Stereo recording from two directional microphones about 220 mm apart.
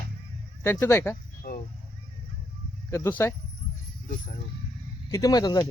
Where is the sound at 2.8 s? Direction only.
10° left (ahead or behind).